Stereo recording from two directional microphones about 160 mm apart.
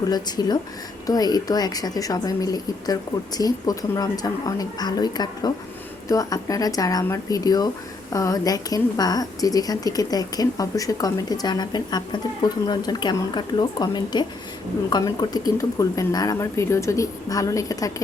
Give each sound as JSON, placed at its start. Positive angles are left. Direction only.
{"t": 0.1, "sound": "a woman's voice", "side_deg": 25}